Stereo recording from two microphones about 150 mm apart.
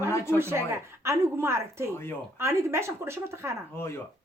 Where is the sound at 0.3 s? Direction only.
15° right (ahead or behind).